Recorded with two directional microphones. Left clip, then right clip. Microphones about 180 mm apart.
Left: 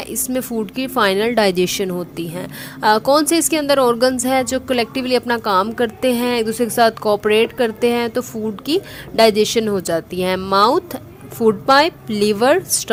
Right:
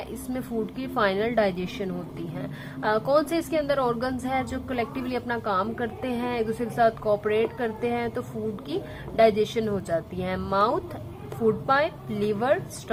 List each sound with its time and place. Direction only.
0.1 s a woman's voice: 40° left (ahead or behind)